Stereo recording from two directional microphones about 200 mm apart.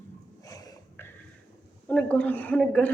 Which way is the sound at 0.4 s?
20° left (ahead or behind).